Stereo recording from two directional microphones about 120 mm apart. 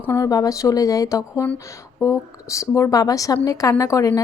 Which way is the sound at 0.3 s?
30° left (ahead or behind).